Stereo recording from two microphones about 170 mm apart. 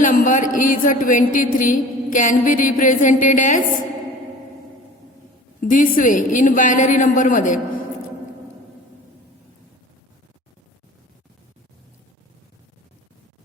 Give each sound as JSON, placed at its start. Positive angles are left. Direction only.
{"t": 0.0, "sound": "speech", "side_deg": 50}
{"t": 5.6, "sound": "speech", "side_deg": 50}